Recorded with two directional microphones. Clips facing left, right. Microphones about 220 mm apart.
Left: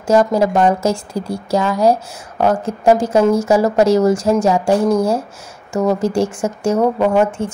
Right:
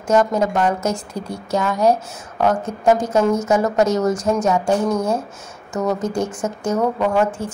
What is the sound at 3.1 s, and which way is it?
Speech, 10° left (ahead or behind).